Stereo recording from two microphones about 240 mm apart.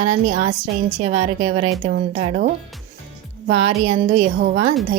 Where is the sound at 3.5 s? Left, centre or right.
Right.